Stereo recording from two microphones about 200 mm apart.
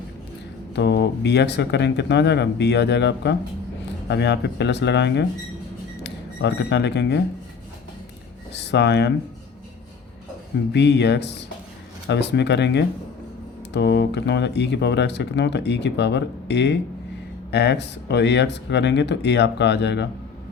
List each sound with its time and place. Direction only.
0.8 s speech: 60° left (ahead or behind)
8.5 s speech: 60° left (ahead or behind)
10.7 s speech: 60° left (ahead or behind)